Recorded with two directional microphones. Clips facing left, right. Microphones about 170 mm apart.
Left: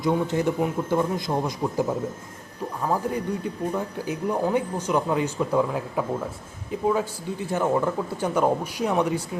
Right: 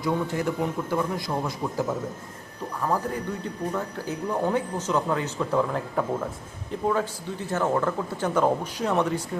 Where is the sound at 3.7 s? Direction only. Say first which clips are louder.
Left 2 dB; 15° left (ahead or behind).